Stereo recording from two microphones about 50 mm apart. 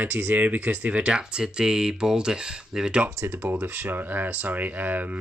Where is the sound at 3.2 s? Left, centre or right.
Right.